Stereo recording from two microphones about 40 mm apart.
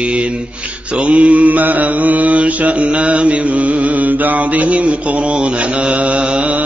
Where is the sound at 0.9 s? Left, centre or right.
Right.